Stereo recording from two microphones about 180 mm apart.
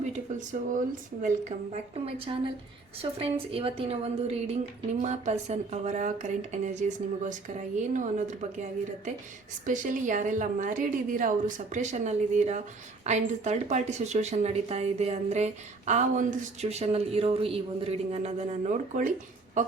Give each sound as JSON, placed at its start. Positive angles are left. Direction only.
{"t": 0.0, "sound": "a sound", "side_deg": -40}
{"t": 1.2, "sound": "a woman's voice", "side_deg": -35}
{"t": 9.6, "sound": "a woman's voice", "side_deg": -45}